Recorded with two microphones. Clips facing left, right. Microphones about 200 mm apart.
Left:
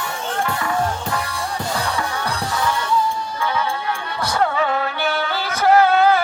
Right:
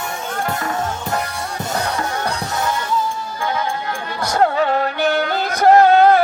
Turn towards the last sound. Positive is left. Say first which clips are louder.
# right 3 dB
turn(degrees=-40)  # may be behind; listen again after turning